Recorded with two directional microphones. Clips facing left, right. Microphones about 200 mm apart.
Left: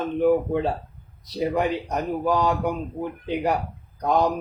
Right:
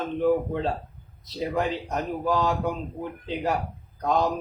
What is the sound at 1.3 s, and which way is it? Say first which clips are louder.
A man's voice: left 3 dB; 15° left (ahead or behind).